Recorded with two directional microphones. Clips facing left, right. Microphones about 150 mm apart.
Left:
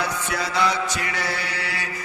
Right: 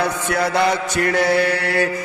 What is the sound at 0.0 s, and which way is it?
Mantra, 55° right (ahead or behind).